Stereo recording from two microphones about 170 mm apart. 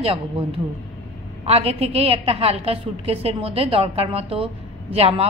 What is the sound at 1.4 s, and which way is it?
A woman's voice, 35° right (ahead or behind).